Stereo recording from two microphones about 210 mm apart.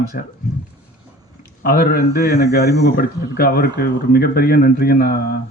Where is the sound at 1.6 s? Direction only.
45° left (ahead or behind).